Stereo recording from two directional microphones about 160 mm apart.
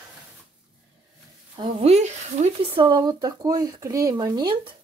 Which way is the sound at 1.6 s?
40° right (ahead or behind).